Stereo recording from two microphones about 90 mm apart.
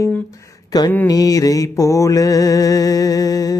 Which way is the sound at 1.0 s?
45° left (ahead or behind).